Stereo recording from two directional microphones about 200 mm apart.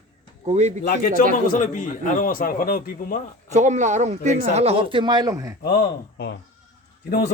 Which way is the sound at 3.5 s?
35° right (ahead or behind).